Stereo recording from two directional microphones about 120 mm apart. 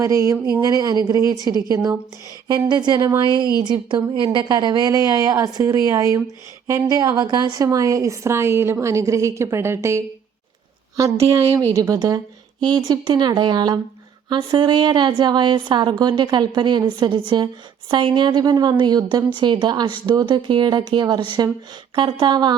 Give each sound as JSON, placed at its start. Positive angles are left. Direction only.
{"t": 0.0, "sound": "a woman's voice", "side_deg": -25}